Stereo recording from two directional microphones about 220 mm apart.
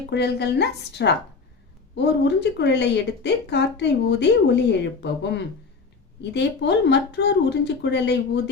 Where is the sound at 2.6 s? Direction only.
50° left (ahead or behind).